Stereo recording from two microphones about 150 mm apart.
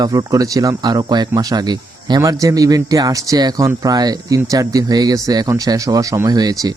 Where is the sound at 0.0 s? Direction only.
25° right (ahead or behind).